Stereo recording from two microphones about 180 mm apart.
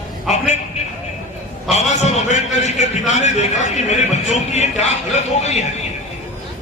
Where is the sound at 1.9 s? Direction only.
40° left (ahead or behind).